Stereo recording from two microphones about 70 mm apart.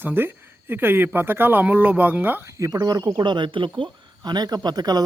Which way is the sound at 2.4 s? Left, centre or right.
Right.